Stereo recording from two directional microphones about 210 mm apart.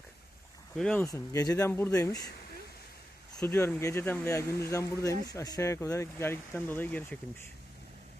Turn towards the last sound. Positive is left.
turn(degrees=10)  # may be behind; listen again after turning